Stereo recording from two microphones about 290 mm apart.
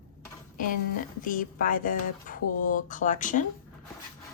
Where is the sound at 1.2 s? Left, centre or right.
Left.